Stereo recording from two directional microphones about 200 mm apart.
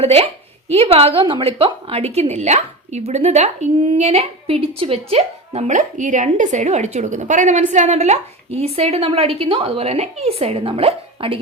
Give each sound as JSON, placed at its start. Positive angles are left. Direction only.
{"t": 0.0, "sound": "a woman's voice", "side_deg": -30}